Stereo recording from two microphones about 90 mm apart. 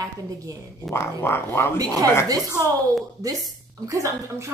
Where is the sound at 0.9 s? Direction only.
30° left (ahead or behind).